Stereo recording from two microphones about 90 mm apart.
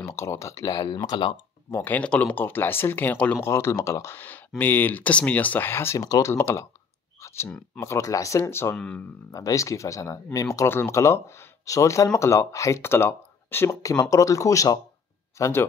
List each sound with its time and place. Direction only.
0.0 s speech: 30° left (ahead or behind)
1.0 s speech: 55° left (ahead or behind)
1.9 s speech: 15° left (ahead or behind)
3.4 s speech: 30° left (ahead or behind)
5.9 s speech: 45° left (ahead or behind)
6.2 s speech: 30° left (ahead or behind)
7.2 s clicking: 30° left (ahead or behind)
7.4 s speech: 15° left (ahead or behind)
7.8 s speech: 35° left (ahead or behind)
8.7 s speech: 10° left (ahead or behind)
9.3 s speech: 40° left (ahead or behind)
14.1 s speech: 40° left (ahead or behind)